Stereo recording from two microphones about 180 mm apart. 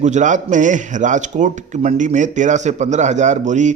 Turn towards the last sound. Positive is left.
turn(degrees=-40)  # may be behind; listen again after turning